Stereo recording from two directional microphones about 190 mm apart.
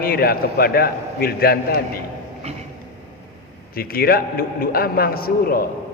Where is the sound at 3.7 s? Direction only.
50° left (ahead or behind).